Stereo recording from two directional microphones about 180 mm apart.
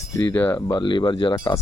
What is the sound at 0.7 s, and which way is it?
Speech, 25° left (ahead or behind).